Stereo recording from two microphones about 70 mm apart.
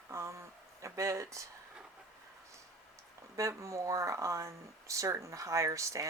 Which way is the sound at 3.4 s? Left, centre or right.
Right.